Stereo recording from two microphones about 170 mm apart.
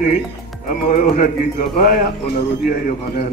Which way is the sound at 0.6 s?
50° left (ahead or behind).